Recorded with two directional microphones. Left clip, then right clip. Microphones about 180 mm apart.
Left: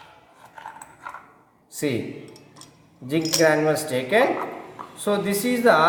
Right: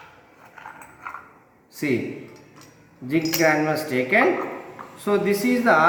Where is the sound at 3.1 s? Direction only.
60° left (ahead or behind).